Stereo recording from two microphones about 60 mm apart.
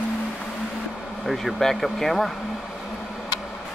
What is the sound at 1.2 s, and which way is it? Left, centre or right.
Speech, centre.